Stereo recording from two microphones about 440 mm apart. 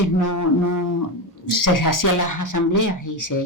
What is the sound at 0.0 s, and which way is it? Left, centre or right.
Speech, left.